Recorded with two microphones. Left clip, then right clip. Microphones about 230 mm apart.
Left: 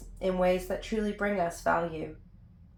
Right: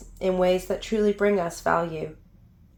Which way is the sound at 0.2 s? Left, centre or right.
Right.